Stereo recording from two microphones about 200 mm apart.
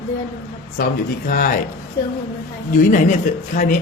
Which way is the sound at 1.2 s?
40° left (ahead or behind).